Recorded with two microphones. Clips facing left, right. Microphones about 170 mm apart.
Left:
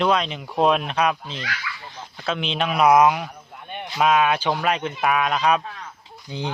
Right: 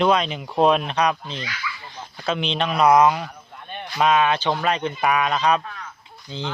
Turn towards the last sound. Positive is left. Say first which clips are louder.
# left 1 dB
turn(degrees=15)  # may be behind; listen again after turning